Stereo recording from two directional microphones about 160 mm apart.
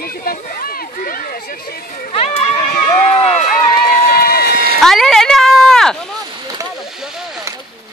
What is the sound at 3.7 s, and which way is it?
Run, 70° left (ahead or behind).